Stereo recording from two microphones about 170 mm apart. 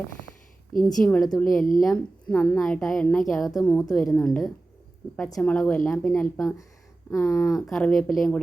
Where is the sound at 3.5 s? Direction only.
15° left (ahead or behind).